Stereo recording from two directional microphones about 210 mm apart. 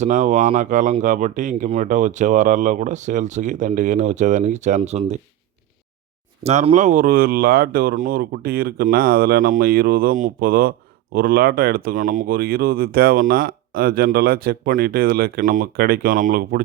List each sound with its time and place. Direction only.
0.0 s speech: 35° right (ahead or behind)
6.4 s speech: 30° right (ahead or behind)